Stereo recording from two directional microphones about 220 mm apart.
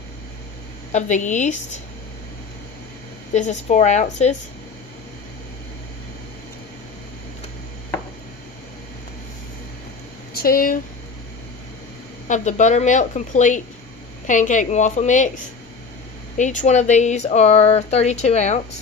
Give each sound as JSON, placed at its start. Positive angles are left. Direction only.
{"t": 0.9, "sound": "speech", "side_deg": 35}
{"t": 3.3, "sound": "speech", "side_deg": 30}
{"t": 10.3, "sound": "speech", "side_deg": 40}
{"t": 12.3, "sound": "speech", "side_deg": 35}
{"t": 16.3, "sound": "speech", "side_deg": 35}